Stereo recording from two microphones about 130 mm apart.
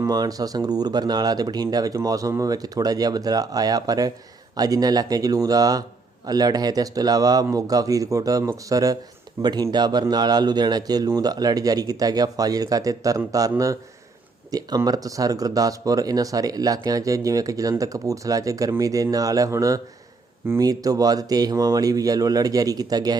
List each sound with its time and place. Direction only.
0.0 s speech: 30° right (ahead or behind)